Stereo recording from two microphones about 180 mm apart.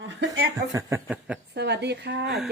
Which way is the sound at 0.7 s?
15° right (ahead or behind).